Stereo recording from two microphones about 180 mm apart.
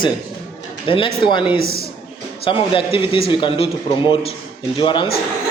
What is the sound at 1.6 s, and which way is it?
Speech, 60° left (ahead or behind).